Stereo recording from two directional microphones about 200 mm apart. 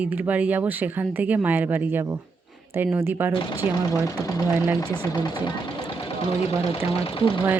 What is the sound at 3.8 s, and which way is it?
Speech, 15° left (ahead or behind).